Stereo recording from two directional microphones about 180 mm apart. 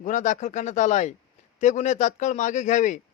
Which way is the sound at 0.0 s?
45° left (ahead or behind).